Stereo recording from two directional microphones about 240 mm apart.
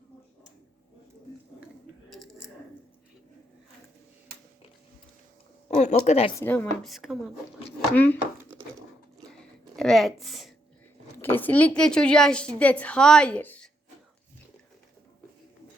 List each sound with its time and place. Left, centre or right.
5.7 s speech: left
6.3 s a woman's voice: centre
9.7 s a woman's voice: centre